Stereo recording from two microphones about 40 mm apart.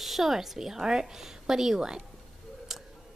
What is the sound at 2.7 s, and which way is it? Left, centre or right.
Tick, centre.